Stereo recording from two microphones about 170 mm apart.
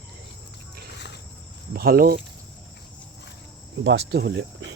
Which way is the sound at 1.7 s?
65° right (ahead or behind).